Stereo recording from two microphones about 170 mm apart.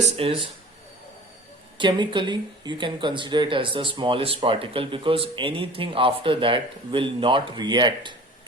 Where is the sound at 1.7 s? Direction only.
30° right (ahead or behind).